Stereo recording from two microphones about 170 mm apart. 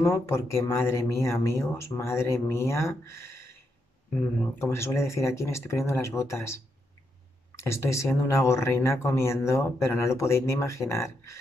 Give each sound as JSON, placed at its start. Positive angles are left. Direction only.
{"t": 0.0, "sound": "speech", "side_deg": 15}